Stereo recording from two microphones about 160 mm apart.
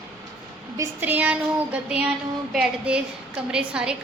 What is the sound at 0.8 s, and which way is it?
Speech, 10° right (ahead or behind).